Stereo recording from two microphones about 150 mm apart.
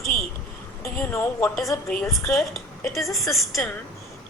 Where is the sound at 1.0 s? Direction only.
15° left (ahead or behind).